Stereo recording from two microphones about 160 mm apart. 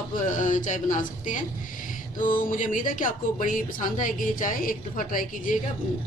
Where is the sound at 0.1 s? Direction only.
55° left (ahead or behind).